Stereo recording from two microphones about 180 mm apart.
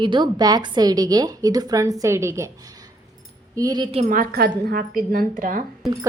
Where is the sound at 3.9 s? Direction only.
45° right (ahead or behind).